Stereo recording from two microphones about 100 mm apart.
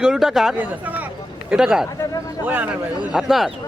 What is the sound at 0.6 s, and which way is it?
Speech, 15° right (ahead or behind).